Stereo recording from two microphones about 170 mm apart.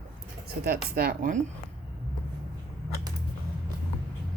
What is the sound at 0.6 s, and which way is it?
Speech, 65° right (ahead or behind).